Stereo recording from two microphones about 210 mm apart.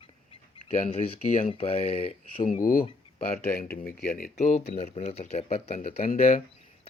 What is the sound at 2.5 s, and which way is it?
Speech, 40° left (ahead or behind).